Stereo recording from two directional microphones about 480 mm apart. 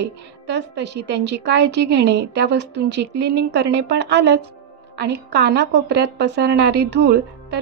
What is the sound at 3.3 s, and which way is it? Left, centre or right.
A woman's voice, right.